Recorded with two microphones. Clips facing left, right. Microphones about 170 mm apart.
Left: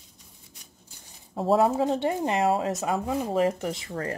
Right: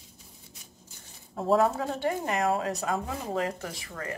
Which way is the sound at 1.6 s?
20° left (ahead or behind).